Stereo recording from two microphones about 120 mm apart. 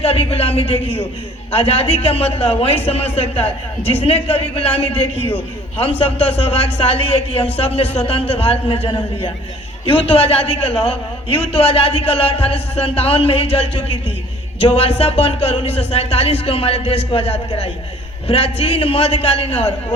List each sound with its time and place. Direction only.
0.0 s a man's voice: 55° left (ahead or behind)
5.7 s a man's voice: 55° left (ahead or behind)